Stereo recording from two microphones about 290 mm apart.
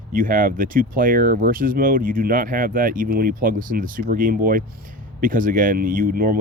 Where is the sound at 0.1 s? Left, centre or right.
Right.